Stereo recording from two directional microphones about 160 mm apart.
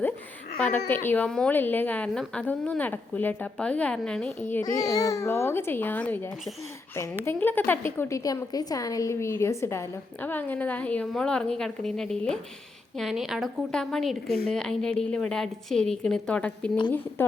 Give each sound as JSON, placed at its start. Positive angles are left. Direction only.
{"t": 0.9, "sound": "a woman's voice", "side_deg": 15}
{"t": 4.6, "sound": "a woman's voice", "side_deg": 20}